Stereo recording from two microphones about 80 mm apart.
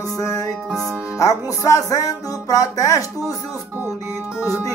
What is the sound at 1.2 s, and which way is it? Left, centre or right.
Music, left.